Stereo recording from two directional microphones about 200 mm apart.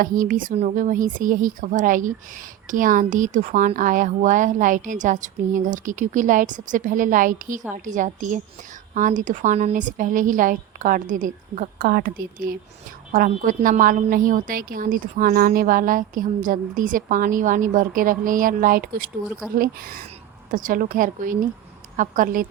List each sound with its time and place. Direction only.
0.0 s a woman's voice: 45° right (ahead or behind)